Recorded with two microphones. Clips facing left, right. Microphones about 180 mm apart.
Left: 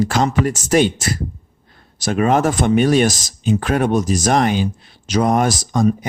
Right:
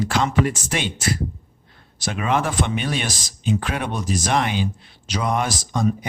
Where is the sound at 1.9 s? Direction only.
45° left (ahead or behind).